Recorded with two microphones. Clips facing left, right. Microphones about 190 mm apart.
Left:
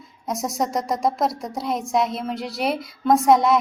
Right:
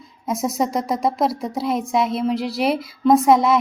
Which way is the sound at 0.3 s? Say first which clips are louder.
Right 3 dB; centre (ahead or behind).